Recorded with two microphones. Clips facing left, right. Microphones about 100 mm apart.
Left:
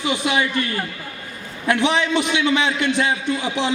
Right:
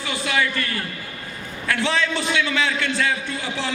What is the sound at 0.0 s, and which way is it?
Speech, 20° left (ahead or behind).